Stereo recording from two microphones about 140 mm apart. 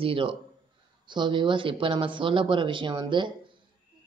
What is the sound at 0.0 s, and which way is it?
A man's voice, 40° right (ahead or behind).